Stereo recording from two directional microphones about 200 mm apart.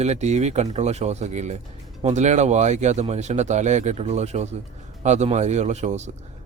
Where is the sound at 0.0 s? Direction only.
35° right (ahead or behind).